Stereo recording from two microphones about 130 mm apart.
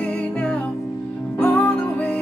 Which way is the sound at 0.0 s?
10° left (ahead or behind).